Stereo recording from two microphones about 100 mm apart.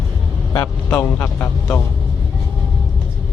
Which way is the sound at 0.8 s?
15° left (ahead or behind).